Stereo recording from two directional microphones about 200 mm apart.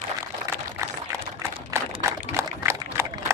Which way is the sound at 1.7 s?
15° right (ahead or behind).